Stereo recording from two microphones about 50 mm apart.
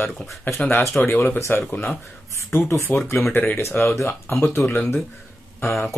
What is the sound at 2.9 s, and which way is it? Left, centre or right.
Speech, left.